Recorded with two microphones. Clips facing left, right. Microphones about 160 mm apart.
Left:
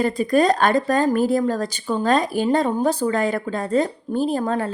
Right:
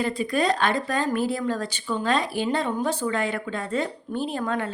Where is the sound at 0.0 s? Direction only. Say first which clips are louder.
Left 6 dB; 45° left (ahead or behind).